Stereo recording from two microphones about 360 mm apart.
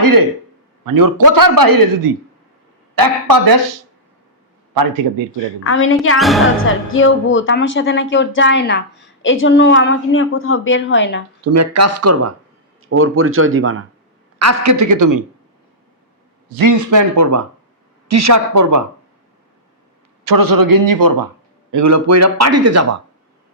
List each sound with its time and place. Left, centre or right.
0.0 s a man's voice: right
5.6 s a woman's voice: left
6.1 s a woman's voice: centre
6.9 s a woman's voice: left
11.5 s a man's voice: right
14.3 s a man's voice: right
16.5 s a man's voice: right
20.2 s a man's voice: right
21.7 s a man's voice: right